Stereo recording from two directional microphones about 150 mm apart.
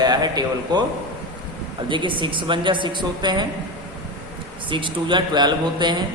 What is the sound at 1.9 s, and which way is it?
A man's voice, 35° right (ahead or behind).